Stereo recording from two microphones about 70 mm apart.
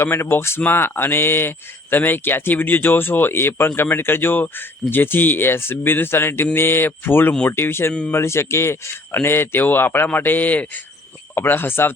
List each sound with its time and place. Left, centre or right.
0.0 s speech: left